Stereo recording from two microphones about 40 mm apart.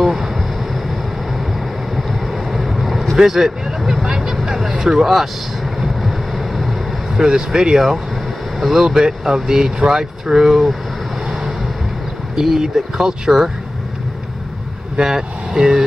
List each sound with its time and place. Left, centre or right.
0.0 s vehicle: centre
2.0 s vehicle: centre
7.2 s speech: centre
8.8 s speech: centre
11.2 s vehicle: centre
12.4 s speech: centre
15.0 s speech: centre